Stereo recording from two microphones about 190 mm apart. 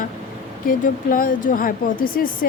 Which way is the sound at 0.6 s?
45° left (ahead or behind).